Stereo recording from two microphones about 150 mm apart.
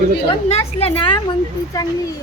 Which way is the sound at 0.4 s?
40° left (ahead or behind).